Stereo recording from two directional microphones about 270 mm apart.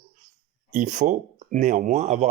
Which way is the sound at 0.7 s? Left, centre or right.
Right.